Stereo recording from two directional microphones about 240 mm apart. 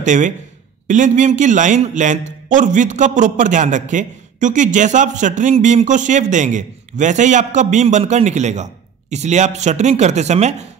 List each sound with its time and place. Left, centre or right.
0.0 s a man's voice: right